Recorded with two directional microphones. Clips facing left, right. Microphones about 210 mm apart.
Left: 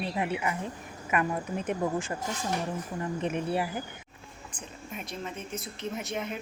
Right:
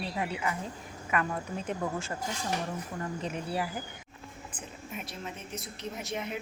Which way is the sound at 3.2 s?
20° left (ahead or behind).